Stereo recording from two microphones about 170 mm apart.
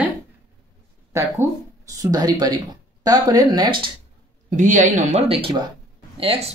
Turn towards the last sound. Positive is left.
turn(degrees=-35)  # may be behind; listen again after turning